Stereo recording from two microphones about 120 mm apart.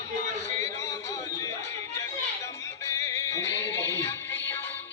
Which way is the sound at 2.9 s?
25° left (ahead or behind).